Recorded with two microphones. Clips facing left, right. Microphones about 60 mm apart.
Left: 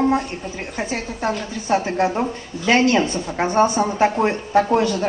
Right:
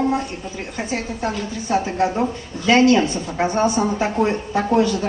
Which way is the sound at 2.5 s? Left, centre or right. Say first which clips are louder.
Left 1 dB; right.